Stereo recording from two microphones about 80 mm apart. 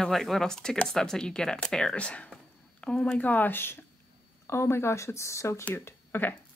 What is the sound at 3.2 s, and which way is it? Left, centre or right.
Speech, left.